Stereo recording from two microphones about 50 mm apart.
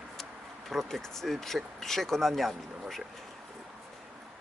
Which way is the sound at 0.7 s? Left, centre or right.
Centre.